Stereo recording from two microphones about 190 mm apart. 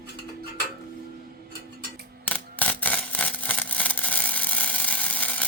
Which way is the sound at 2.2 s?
10° left (ahead or behind).